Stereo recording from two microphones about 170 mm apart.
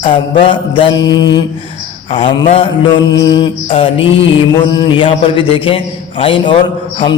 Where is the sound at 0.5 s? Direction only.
25° left (ahead or behind).